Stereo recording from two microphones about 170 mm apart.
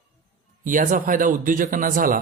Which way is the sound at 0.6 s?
50° right (ahead or behind).